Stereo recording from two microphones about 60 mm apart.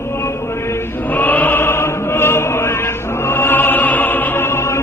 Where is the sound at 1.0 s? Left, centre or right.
Left.